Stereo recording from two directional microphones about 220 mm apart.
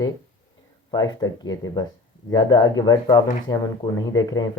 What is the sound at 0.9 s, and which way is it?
Speech, 20° left (ahead or behind).